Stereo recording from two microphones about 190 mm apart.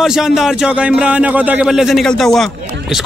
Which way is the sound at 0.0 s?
Centre (ahead or behind).